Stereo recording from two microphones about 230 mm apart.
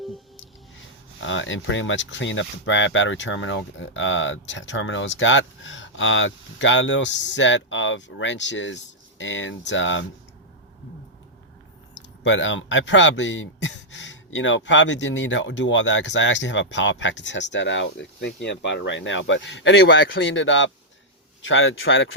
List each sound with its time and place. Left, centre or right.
1.2 s speech: left
12.2 s speech: left